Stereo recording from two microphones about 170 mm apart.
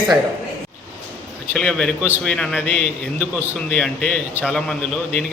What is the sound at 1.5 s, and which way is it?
A man's voice, 5° left (ahead or behind).